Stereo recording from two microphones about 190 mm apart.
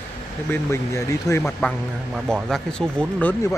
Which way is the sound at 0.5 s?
15° left (ahead or behind).